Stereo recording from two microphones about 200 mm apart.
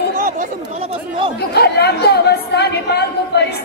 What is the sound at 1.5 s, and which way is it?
Speech, 55° left (ahead or behind).